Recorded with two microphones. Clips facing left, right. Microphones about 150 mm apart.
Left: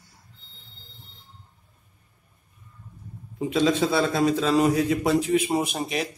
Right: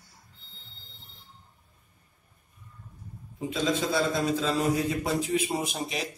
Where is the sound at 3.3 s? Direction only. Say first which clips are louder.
Left 6 dB; 70° left (ahead or behind).